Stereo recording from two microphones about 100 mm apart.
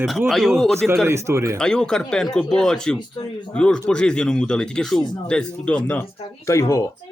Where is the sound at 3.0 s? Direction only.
50° left (ahead or behind).